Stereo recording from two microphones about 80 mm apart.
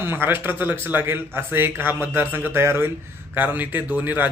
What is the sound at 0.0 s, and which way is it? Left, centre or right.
A man's voice, right.